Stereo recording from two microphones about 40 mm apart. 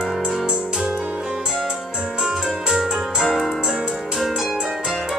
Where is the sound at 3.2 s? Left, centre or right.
Centre.